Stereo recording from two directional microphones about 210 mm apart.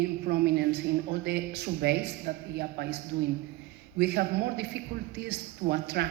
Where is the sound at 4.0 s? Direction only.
50° right (ahead or behind).